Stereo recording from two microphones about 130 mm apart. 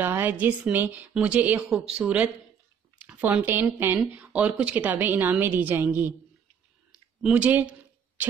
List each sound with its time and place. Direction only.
0.0 s speech: 15° right (ahead or behind)
7.2 s speech: 10° right (ahead or behind)